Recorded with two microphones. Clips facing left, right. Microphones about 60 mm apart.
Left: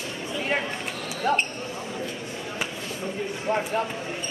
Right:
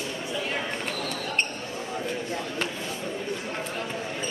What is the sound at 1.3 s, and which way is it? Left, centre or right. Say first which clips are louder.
Basketball bounce: left 7 dB; left.